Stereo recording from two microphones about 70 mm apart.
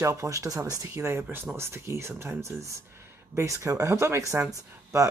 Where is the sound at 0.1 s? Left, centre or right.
Right.